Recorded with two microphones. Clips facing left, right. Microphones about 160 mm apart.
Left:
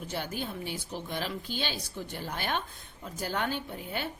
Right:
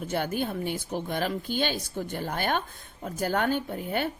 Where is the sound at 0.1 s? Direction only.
55° right (ahead or behind).